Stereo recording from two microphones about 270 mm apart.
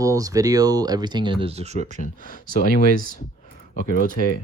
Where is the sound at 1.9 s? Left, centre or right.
Left.